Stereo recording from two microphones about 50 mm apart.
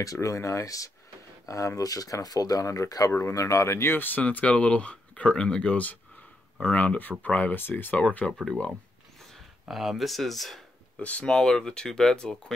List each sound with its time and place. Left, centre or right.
0.2 s speech: left
3.1 s speech: left
3.3 s speech: left
4.2 s speech: left
6.6 s speech: left
8.2 s speech: centre
9.7 s speech: centre
11.0 s speech: left